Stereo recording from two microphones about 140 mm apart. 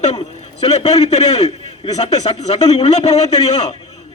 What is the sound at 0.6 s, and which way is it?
A man's voice, 50° left (ahead or behind).